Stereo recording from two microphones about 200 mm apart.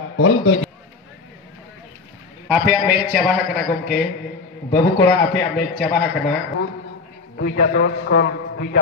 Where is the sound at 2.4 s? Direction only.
5° right (ahead or behind).